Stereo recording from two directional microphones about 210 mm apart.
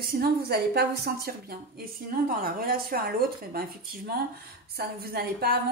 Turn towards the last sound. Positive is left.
turn(degrees=-45)  # may be behind; listen again after turning